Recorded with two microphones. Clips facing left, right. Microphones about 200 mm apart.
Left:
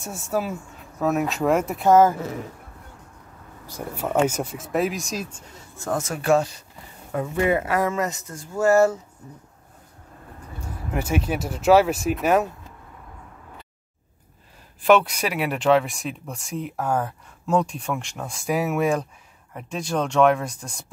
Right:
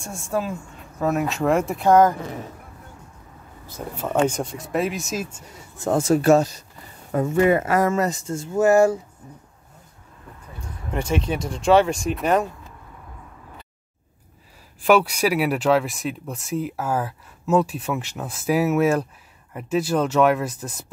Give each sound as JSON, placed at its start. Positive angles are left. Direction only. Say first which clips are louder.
{"t": 0.0, "sound": "speech", "louder": "even", "side_deg": 5}
{"t": 3.6, "sound": "speech", "louder": "left 1 dB", "side_deg": 10}
{"t": 5.8, "sound": "speech", "louder": "right 8 dB", "side_deg": -25}
{"t": 10.9, "sound": "speech", "louder": "right 1 dB", "side_deg": 5}
{"t": 14.9, "sound": "speech", "louder": "right 1 dB", "side_deg": -5}